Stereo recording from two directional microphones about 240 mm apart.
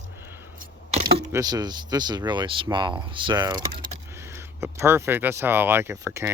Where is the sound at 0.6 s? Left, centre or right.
Right.